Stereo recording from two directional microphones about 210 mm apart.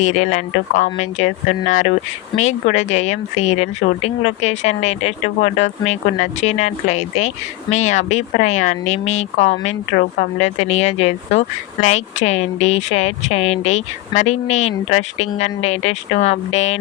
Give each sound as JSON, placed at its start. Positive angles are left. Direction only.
{"t": 0.0, "sound": "speech", "side_deg": 35}